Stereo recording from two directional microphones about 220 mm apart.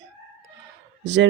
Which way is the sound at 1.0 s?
50° right (ahead or behind).